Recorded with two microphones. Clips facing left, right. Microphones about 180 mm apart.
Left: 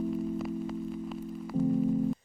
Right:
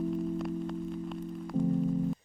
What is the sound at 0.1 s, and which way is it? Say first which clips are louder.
Music: even; centre (ahead or behind).